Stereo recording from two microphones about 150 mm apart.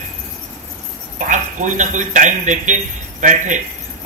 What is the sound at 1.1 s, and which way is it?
Speech, 60° right (ahead or behind).